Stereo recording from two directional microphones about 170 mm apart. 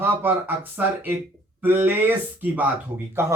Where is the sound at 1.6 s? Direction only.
10° right (ahead or behind).